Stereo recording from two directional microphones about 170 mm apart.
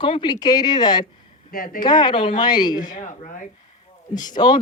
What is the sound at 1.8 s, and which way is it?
Speech, 25° left (ahead or behind).